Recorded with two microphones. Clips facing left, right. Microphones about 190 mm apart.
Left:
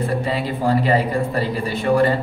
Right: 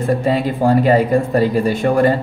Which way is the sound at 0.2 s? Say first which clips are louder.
Right 6 dB; 45° right (ahead or behind).